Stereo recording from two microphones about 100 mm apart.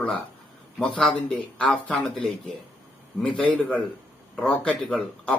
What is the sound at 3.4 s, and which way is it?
Speech, 15° left (ahead or behind).